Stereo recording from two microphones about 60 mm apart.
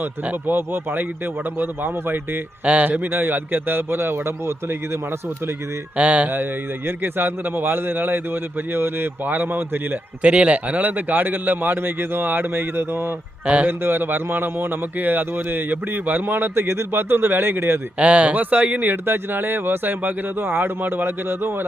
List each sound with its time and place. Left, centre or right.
0.0 s speech: right
2.6 s speech: right
3.1 s speech: right
6.0 s speech: right
6.3 s speech: right
10.2 s speech: right
13.4 s speech: right
13.7 s speech: right
17.9 s speech: right